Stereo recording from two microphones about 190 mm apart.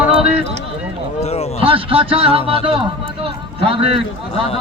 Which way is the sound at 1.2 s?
35° left (ahead or behind).